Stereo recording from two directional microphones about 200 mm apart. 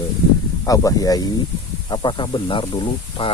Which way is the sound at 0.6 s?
15° left (ahead or behind).